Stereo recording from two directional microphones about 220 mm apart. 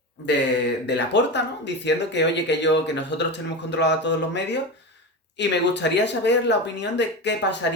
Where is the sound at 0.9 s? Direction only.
50° left (ahead or behind).